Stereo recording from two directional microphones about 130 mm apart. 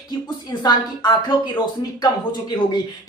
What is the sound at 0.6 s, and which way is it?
A woman's voice, 35° left (ahead or behind).